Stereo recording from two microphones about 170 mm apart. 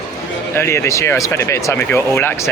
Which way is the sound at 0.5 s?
15° left (ahead or behind).